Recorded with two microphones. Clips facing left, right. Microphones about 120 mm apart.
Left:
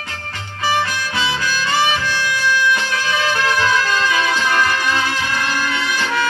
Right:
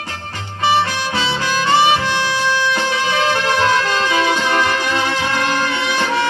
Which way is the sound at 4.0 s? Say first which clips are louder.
Right 2 dB; 30° right (ahead or behind).